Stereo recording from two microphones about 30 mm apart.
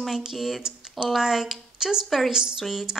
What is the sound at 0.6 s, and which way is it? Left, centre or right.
Typing, right.